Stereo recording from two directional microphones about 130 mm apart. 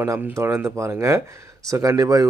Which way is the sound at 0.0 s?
20° right (ahead or behind).